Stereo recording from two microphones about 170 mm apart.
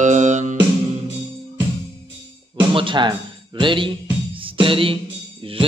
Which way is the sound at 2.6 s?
30° right (ahead or behind).